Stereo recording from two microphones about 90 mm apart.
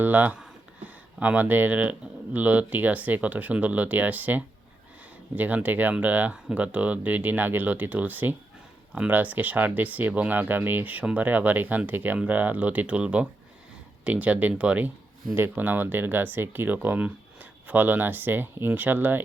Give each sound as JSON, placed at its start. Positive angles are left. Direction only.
{"t": 0.0, "sound": "speech", "side_deg": -20}